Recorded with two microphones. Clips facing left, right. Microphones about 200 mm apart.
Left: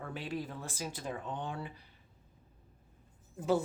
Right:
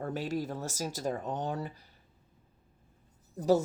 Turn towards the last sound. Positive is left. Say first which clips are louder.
# right 5 dB
turn(degrees=-40)  # may be behind; listen again after turning